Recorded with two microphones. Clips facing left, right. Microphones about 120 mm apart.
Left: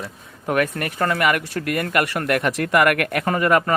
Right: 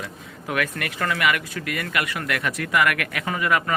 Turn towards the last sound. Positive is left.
turn(degrees=45)  # may be behind; listen again after turning